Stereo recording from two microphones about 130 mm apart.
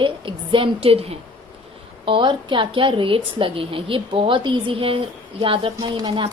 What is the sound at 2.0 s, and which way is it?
A woman's voice, 40° right (ahead or behind).